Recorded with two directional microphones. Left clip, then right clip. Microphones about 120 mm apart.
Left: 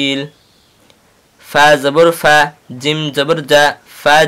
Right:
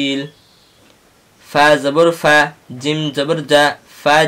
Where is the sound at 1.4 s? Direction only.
40° left (ahead or behind).